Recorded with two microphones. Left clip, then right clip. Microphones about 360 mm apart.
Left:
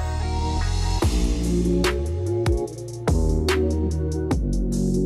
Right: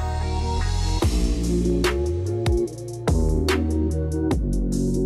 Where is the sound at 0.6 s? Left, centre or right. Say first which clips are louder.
Even; centre.